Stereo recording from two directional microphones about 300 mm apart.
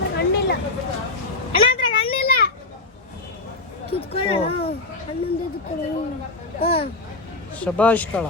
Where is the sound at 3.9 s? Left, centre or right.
Centre.